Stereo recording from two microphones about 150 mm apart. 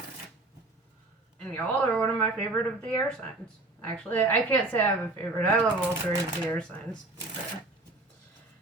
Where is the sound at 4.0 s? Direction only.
10° left (ahead or behind).